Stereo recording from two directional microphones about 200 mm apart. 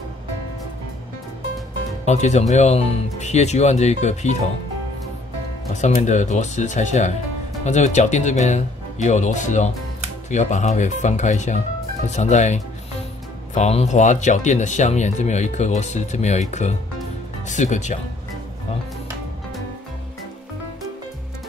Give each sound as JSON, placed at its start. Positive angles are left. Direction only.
{"t": 2.0, "sound": "speech", "side_deg": 35}
{"t": 5.8, "sound": "speech", "side_deg": 35}